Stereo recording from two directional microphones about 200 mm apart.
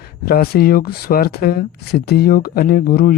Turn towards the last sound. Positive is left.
turn(degrees=50)  # may be behind; listen again after turning